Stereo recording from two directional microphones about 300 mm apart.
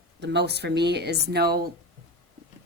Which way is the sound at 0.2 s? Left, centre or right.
Right.